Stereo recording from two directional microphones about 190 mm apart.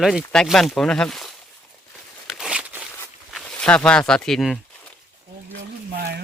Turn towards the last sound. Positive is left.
turn(degrees=-55)  # may be behind; listen again after turning